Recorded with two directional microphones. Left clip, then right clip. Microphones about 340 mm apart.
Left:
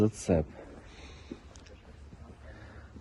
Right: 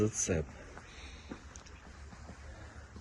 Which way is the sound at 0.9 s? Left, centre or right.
Centre.